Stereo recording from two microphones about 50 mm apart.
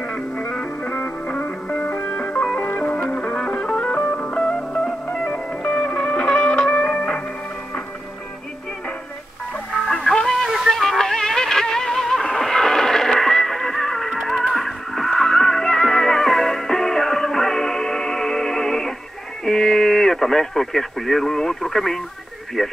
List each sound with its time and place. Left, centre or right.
0.9 s music: left
4.4 s music: centre
9.7 s music: centre
19.4 s radio: centre
22.6 s speech: centre